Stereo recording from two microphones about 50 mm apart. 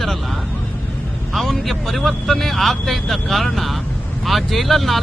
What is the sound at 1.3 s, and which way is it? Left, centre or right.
Speech, centre.